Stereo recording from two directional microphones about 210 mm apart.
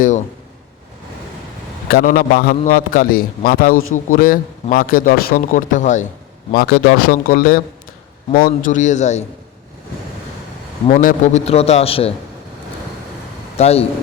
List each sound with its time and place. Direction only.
1.9 s a man's voice: 45° left (ahead or behind)
10.8 s a man's voice: 35° left (ahead or behind)
13.6 s a man's voice: 30° left (ahead or behind)